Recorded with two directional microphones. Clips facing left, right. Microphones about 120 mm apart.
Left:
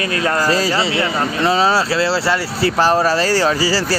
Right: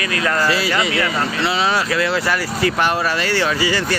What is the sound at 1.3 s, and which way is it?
Speech, 40° left (ahead or behind).